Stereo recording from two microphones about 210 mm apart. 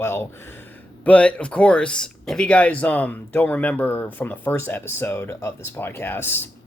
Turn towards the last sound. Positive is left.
turn(degrees=10)  # may be behind; listen again after turning